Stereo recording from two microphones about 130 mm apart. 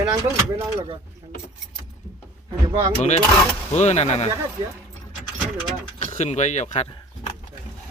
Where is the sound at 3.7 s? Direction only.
60° left (ahead or behind).